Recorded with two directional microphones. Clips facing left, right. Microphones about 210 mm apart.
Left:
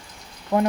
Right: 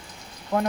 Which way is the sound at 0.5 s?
15° left (ahead or behind).